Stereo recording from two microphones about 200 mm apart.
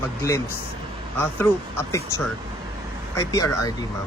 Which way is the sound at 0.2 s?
15° left (ahead or behind).